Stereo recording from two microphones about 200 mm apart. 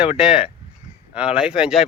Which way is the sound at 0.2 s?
5° right (ahead or behind).